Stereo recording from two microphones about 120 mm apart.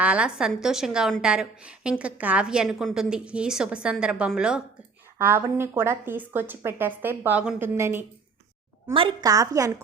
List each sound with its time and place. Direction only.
0.0 s a woman's voice: 10° right (ahead or behind)
5.1 s a woman's voice: 20° right (ahead or behind)
8.9 s a woman's voice: 45° right (ahead or behind)
9.2 s speech: 30° right (ahead or behind)